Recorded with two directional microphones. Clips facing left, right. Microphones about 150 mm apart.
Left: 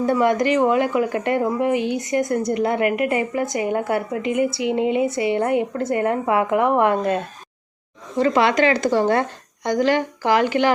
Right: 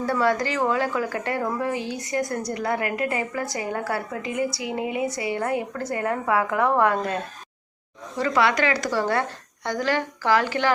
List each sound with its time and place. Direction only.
0.0 s a woman's voice: 20° left (ahead or behind)